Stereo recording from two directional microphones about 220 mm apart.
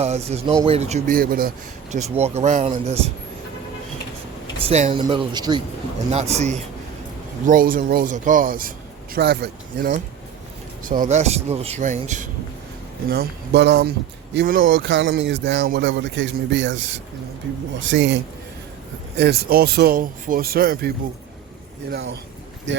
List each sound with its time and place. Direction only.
0.0 s speech: 30° right (ahead or behind)
4.6 s speech: 30° right (ahead or behind)
6.1 s speech: 30° right (ahead or behind)
13.1 s speech: 50° right (ahead or behind)
14.3 s speech: 40° right (ahead or behind); by 18.2 s 55° right (ahead or behind)
19.1 s speech: 45° right (ahead or behind)
22.7 s speech: 55° right (ahead or behind)